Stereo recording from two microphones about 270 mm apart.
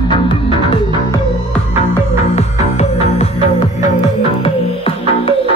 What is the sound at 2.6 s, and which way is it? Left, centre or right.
Music, left.